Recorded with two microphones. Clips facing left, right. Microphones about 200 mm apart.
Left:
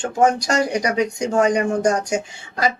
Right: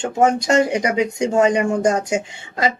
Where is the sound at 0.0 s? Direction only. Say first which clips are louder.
Right 1 dB; 25° right (ahead or behind).